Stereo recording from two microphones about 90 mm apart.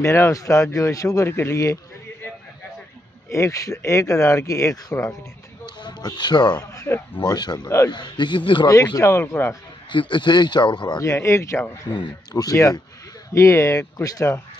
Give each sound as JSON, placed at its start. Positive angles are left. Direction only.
{"t": 0.0, "sound": "speech", "side_deg": 35}
{"t": 3.3, "sound": "speech", "side_deg": 35}
{"t": 5.8, "sound": "speech", "side_deg": 55}
{"t": 6.7, "sound": "speech", "side_deg": 35}
{"t": 7.2, "sound": "speech", "side_deg": 50}
{"t": 8.9, "sound": "speech", "side_deg": 30}
{"t": 9.8, "sound": "speech", "side_deg": 65}
{"t": 11.0, "sound": "speech", "side_deg": 35}
{"t": 12.3, "sound": "speech", "side_deg": 40}